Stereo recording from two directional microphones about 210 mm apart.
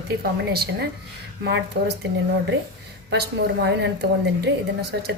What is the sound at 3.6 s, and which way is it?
Speech, 55° right (ahead or behind).